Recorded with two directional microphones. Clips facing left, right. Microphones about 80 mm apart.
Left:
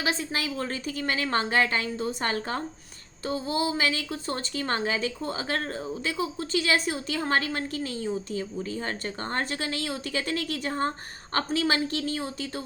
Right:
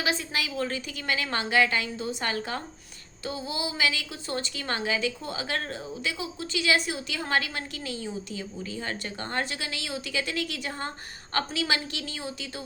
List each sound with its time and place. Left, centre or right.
0.0 s a woman's voice: left